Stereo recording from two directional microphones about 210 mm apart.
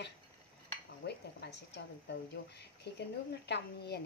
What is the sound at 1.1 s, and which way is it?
A woman's voice, 55° left (ahead or behind).